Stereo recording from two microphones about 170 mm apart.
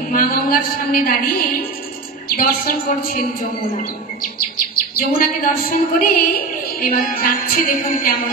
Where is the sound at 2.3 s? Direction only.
55° left (ahead or behind).